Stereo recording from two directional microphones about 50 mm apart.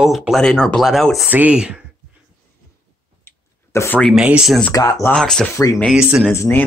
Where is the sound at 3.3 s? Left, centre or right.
Left.